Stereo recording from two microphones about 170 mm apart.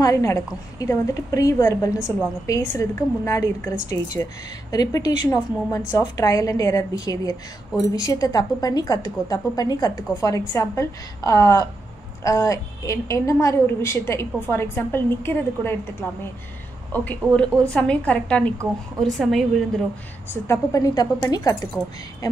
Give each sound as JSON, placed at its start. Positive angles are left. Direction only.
{"t": 0.0, "sound": "a woman's voice", "side_deg": 20}
{"t": 20.4, "sound": "a woman's voice", "side_deg": 20}